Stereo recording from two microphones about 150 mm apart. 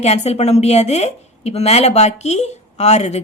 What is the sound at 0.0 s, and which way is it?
A woman's voice, 45° left (ahead or behind).